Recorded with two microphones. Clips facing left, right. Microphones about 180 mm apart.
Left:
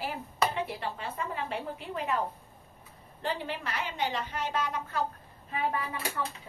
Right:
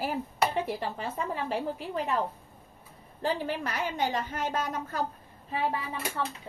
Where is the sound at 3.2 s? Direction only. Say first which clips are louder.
Right 4 dB; 45° right (ahead or behind).